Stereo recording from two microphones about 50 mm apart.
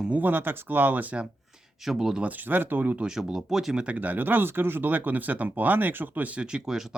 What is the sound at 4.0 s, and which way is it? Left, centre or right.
Speech, right.